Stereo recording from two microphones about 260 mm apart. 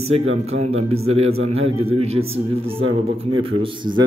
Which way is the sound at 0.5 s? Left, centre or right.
Right.